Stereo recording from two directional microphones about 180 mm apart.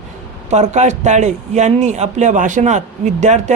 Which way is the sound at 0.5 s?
40° right (ahead or behind).